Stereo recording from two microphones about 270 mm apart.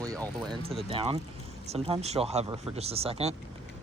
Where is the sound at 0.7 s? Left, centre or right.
Right.